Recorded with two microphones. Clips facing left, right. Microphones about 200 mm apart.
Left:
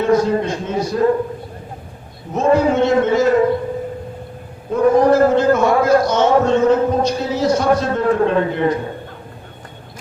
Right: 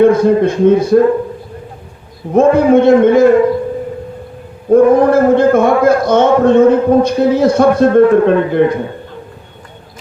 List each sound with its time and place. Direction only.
0.0 s speech: 55° right (ahead or behind)
2.3 s speech: 55° right (ahead or behind)
4.7 s speech: 55° right (ahead or behind)